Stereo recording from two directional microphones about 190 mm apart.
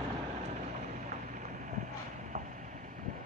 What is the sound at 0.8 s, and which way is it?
Boat, 40° right (ahead or behind).